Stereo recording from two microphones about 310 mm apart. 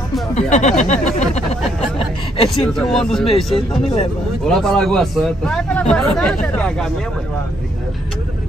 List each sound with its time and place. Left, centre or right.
0.3 s speech: left
2.0 s chuckle: centre
2.7 s speech: centre
3.5 s speech: centre
4.5 s speech: centre